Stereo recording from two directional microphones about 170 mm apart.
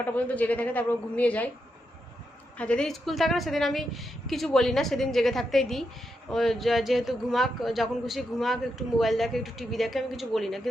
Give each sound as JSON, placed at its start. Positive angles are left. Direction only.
{"t": 0.0, "sound": "a woman's voice", "side_deg": 10}
{"t": 2.6, "sound": "a man's voice", "side_deg": 5}